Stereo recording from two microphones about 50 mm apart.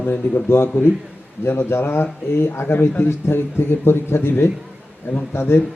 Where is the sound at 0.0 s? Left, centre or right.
Left.